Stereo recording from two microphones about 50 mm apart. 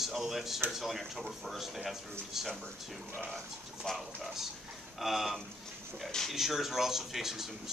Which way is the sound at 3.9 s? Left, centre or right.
Centre.